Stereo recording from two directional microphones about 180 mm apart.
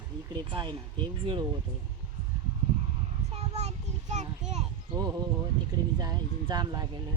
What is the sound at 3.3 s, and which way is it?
Child singing, 35° right (ahead or behind).